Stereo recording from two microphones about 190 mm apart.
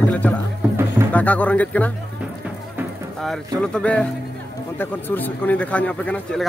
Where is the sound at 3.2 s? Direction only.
5° left (ahead or behind).